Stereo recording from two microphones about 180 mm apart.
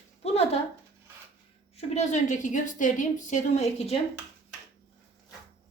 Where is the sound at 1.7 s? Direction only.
35° left (ahead or behind).